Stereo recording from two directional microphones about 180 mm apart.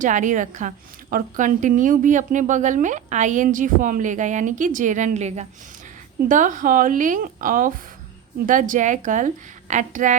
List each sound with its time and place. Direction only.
0.0 s speech: 45° right (ahead or behind)